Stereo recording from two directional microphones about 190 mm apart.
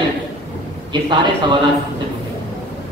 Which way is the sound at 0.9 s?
25° right (ahead or behind).